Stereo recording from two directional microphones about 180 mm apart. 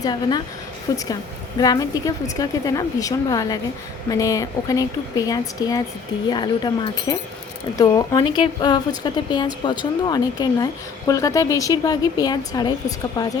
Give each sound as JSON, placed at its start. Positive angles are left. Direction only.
{"t": 0.0, "sound": "a woman's voice", "side_deg": 25}